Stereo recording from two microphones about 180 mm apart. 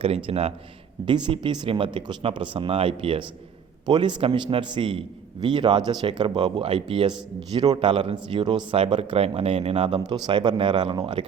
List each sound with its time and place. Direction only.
0.3 s a man's voice: 35° right (ahead or behind)